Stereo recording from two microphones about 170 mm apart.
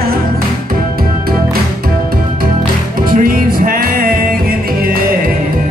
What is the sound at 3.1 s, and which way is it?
Music, 55° right (ahead or behind).